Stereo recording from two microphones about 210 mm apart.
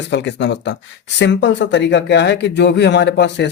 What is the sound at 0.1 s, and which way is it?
Speech, 55° left (ahead or behind).